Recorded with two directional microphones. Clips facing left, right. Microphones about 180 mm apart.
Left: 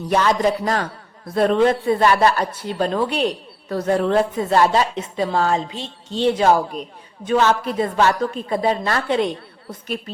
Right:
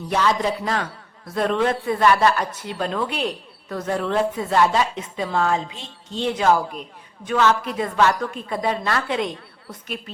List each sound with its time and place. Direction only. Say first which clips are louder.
0.1 s a woman's voice: left 3 dB; 45° left (ahead or behind)